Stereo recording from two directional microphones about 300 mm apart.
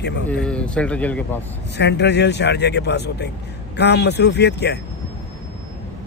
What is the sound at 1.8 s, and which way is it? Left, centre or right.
Speech, left.